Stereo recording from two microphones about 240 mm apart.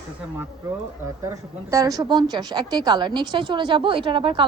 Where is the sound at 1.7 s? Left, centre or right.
Centre.